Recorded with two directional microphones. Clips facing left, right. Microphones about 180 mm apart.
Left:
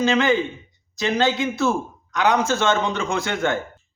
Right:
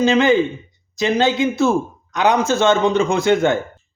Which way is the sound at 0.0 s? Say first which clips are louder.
Right 5 dB; 20° right (ahead or behind).